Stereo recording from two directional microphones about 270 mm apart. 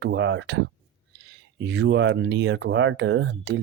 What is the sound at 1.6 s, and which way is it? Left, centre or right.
Speech, right.